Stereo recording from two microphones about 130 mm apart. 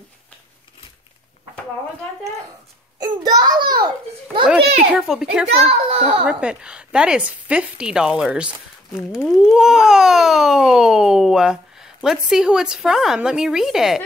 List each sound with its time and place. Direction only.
3.0 s a sound: 30° right (ahead or behind)
4.9 s speech: 5° right (ahead or behind)
5.6 s a child's voice: 50° right (ahead or behind)
6.2 s a woman's voice: 5° right (ahead or behind)